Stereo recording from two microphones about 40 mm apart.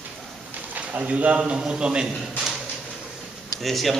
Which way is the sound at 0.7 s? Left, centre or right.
Right.